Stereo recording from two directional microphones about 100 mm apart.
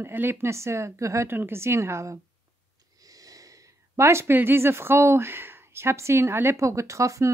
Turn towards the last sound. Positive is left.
turn(degrees=-30)  # may be behind; listen again after turning